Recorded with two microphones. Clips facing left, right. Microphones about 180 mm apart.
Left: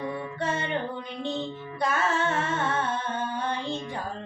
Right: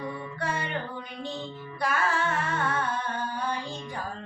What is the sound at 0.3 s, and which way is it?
Music, 25° left (ahead or behind).